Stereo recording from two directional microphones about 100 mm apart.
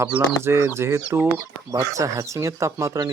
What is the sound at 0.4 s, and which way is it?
Speech, 25° right (ahead or behind).